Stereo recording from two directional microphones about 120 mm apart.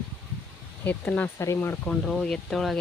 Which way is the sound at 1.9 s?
5° left (ahead or behind).